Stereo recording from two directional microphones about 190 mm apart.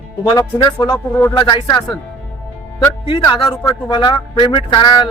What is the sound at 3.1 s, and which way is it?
Speech, 25° left (ahead or behind).